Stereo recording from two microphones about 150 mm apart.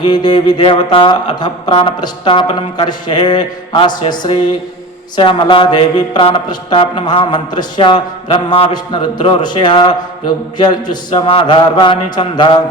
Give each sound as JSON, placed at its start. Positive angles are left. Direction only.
{"t": 0.0, "sound": "mantra", "side_deg": 30}